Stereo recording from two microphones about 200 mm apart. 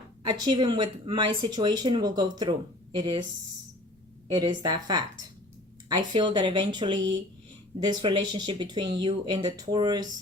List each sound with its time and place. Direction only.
0.3 s speech: 20° right (ahead or behind)
4.3 s speech: 20° right (ahead or behind)